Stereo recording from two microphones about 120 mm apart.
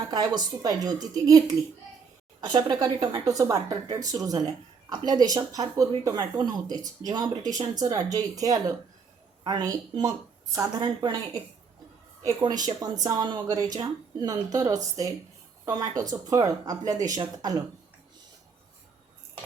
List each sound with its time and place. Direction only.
0.1 s speech: 35° right (ahead or behind)
2.4 s a woman's voice: 35° right (ahead or behind)
10.8 s speech: 40° right (ahead or behind)
12.2 s speech: 30° right (ahead or behind)